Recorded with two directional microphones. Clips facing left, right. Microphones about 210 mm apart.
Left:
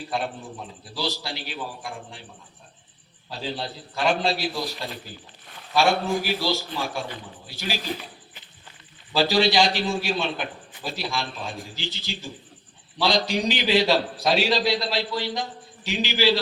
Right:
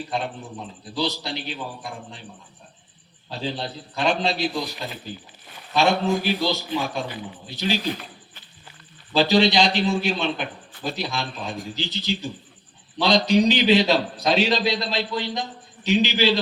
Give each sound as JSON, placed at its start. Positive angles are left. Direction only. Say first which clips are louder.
{"t": 0.9, "sound": "a man's voice", "louder": "right 4 dB", "side_deg": -20}
{"t": 3.2, "sound": "a man's voice", "louder": "right 2 dB", "side_deg": -20}
{"t": 4.6, "sound": "speech", "louder": "even", "side_deg": 0}
{"t": 5.7, "sound": "a man's voice", "louder": "right 1 dB", "side_deg": -20}
{"t": 9.1, "sound": "a man's voice", "louder": "right 2 dB", "side_deg": -20}